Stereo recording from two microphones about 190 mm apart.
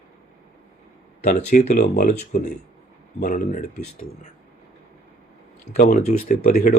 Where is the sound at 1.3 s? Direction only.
40° left (ahead or behind).